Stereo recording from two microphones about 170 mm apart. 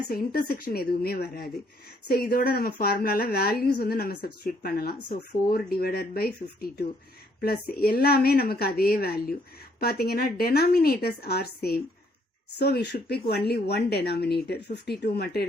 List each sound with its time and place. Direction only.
0.1 s a woman's voice: 60° left (ahead or behind)